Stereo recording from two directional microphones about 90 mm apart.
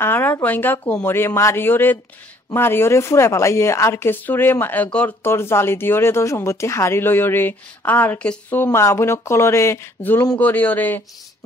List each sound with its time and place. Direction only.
0.0 s speech: 25° left (ahead or behind)
8.6 s speech: 30° left (ahead or behind)
10.3 s speech: 20° left (ahead or behind)